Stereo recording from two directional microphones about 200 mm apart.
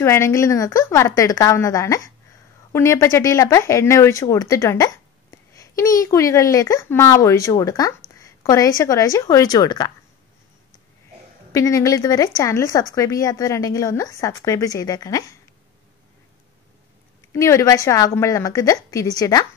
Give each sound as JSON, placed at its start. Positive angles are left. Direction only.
{"t": 0.0, "sound": "speech", "side_deg": 15}
{"t": 11.5, "sound": "speech", "side_deg": 15}
{"t": 17.3, "sound": "speech", "side_deg": 15}